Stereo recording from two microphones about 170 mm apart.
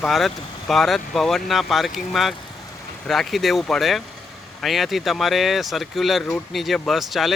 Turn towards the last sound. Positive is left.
turn(degrees=0)  # may be behind; listen again after turning